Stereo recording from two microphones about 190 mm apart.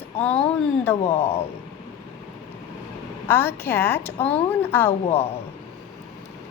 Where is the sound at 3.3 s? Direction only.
10° left (ahead or behind).